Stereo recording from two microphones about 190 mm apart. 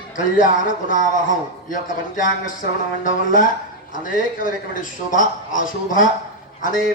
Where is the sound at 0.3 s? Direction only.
45° left (ahead or behind).